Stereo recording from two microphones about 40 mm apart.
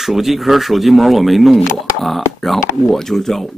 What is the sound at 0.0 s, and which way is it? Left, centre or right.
Speech, centre.